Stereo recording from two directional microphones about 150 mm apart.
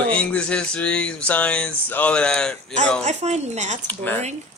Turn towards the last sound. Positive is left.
turn(degrees=10)  # may be behind; listen again after turning